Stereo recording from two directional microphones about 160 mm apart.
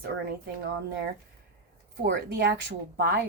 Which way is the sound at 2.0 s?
90° right.